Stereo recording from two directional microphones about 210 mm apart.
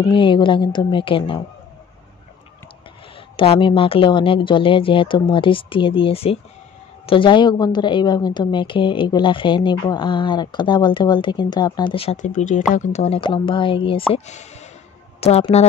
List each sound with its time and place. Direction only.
0.1 s a woman's voice: 25° left (ahead or behind)
3.3 s a woman's voice: 25° left (ahead or behind)